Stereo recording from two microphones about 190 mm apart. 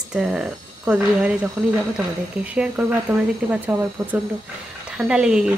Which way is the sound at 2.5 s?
5° right (ahead or behind).